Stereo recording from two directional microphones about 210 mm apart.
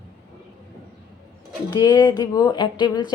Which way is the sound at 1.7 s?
20° left (ahead or behind).